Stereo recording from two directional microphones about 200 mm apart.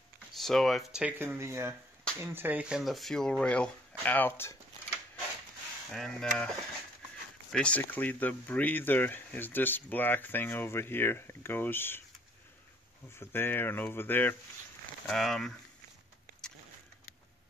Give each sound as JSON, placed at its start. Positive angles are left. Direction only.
{"t": 0.4, "sound": "speech", "side_deg": 0}
{"t": 5.9, "sound": "speech", "side_deg": 0}
{"t": 7.5, "sound": "speech", "side_deg": 5}
{"t": 13.2, "sound": "speech", "side_deg": 10}